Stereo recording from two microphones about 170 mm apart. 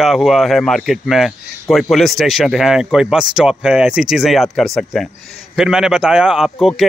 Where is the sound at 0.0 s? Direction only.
Centre (ahead or behind).